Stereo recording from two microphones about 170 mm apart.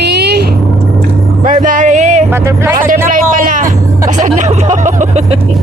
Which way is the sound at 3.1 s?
55° right (ahead or behind).